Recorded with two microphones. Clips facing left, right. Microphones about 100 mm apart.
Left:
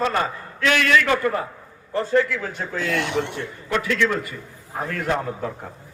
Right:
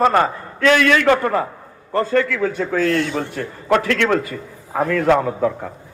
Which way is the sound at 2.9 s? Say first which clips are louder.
Right 3 dB; 70° left (ahead or behind).